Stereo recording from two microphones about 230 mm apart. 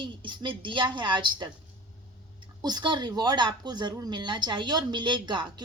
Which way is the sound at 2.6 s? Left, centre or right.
Centre.